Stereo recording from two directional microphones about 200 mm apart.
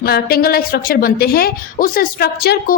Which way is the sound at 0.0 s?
50° left (ahead or behind).